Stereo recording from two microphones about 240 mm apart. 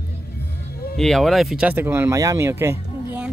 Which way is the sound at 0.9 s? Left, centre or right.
Centre.